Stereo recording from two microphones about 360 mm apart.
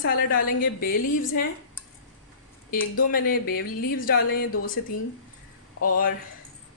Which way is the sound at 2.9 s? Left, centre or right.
Left.